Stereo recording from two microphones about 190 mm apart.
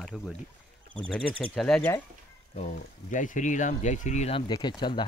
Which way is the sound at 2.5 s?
40° left (ahead or behind).